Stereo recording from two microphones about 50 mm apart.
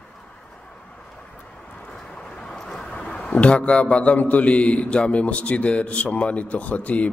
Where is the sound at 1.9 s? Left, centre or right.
Centre.